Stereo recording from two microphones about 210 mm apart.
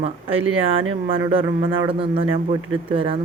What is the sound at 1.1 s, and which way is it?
Speech, 25° right (ahead or behind).